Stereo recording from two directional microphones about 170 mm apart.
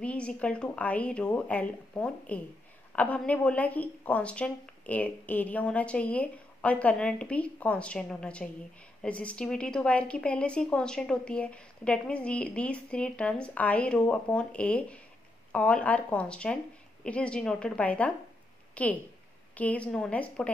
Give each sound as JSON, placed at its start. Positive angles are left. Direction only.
{"t": 0.0, "sound": "a woman's voice", "side_deg": 5}